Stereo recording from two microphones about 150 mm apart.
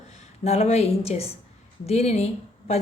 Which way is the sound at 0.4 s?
45° left (ahead or behind).